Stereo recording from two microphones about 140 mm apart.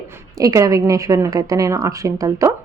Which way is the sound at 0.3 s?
25° right (ahead or behind).